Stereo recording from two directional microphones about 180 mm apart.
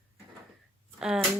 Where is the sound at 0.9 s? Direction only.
5° right (ahead or behind).